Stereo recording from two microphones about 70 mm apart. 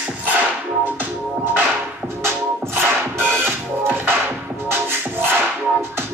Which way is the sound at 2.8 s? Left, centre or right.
Right.